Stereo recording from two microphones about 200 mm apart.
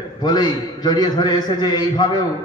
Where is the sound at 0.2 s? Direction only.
20° left (ahead or behind).